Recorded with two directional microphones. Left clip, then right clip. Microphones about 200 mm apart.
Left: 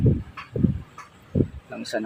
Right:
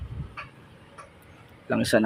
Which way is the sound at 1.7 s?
45° right (ahead or behind).